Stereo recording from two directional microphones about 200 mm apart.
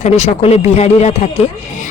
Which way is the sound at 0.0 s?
35° left (ahead or behind).